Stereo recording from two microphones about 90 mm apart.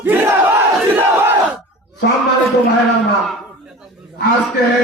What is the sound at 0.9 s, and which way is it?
Crowd, 25° right (ahead or behind).